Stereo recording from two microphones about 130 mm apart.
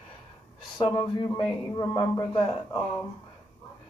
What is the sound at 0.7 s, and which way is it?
A man's voice, 35° left (ahead or behind).